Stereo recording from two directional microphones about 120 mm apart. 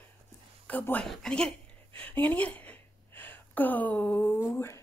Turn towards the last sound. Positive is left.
turn(degrees=20)  # may be behind; listen again after turning